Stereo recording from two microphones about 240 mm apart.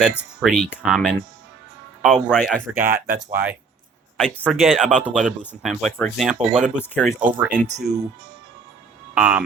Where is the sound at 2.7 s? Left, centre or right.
Right.